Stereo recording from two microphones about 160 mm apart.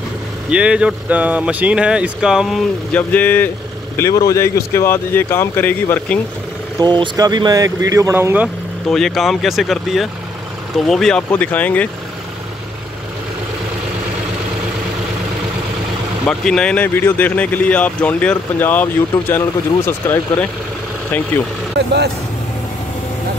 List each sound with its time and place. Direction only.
0.5 s speech: 5° right (ahead or behind)
3.0 s speech: 10° left (ahead or behind)
6.8 s speech: 25° right (ahead or behind)
8.9 s speech: centre (ahead or behind)
16.3 s speech: 5° left (ahead or behind)
21.7 s speech: 90° right